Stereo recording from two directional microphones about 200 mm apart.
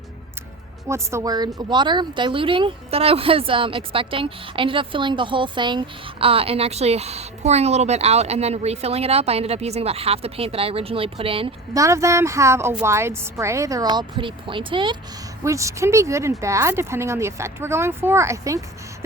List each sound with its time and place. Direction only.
0.9 s speech: 15° right (ahead or behind)